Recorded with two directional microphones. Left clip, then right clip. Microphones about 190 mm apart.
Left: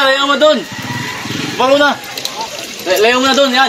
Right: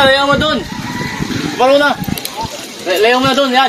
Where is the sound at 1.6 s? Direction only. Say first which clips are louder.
Even; 50° left (ahead or behind).